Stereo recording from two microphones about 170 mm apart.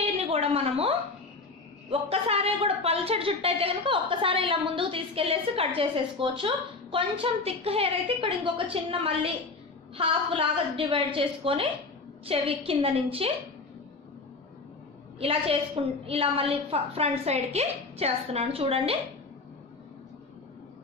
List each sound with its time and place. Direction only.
0.3 s a woman's voice: 35° right (ahead or behind)
15.1 s a woman's voice: 35° right (ahead or behind)